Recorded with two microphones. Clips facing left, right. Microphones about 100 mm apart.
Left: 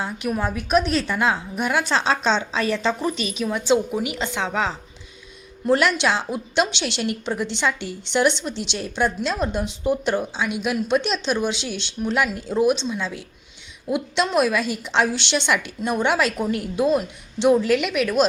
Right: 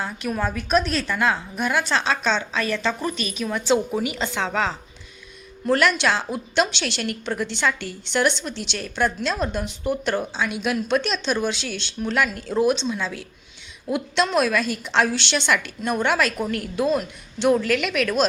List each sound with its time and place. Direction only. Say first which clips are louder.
0.0 s a woman's voice: left 1 dB; 15° left (ahead or behind)
10.3 s a woman's voice: even; 10° left (ahead or behind)